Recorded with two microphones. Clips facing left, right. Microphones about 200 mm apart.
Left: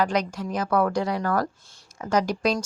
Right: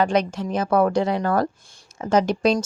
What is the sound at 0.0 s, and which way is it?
Speech, 25° right (ahead or behind).